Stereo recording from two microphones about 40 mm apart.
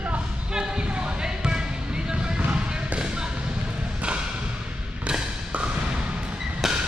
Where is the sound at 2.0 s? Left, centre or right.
Centre.